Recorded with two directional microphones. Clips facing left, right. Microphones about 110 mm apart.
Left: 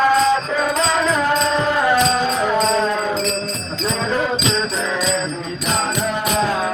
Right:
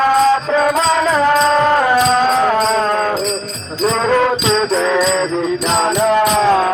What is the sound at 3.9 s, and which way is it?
Music, 85° right.